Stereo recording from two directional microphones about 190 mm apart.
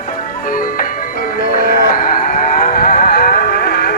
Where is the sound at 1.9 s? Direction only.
45° left (ahead or behind).